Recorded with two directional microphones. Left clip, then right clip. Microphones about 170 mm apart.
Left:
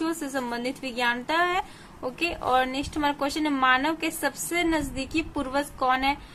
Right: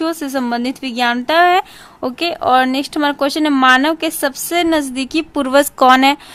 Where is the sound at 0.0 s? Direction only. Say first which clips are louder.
Right 10 dB; 40° right (ahead or behind).